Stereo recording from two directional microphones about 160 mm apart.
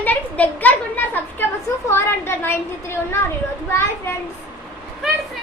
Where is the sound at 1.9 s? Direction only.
15° left (ahead or behind).